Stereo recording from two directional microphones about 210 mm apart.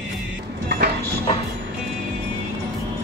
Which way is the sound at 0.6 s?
50° right (ahead or behind).